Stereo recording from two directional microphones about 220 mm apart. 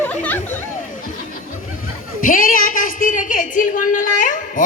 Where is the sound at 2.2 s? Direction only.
40° left (ahead or behind).